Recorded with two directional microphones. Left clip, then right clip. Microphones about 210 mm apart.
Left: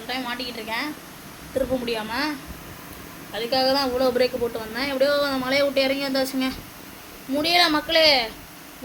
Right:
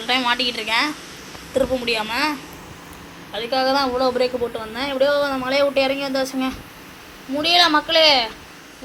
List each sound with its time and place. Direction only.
0.1 s a woman's voice: 15° right (ahead or behind)
1.5 s a woman's voice: 5° right (ahead or behind)
3.3 s a woman's voice: 10° right (ahead or behind)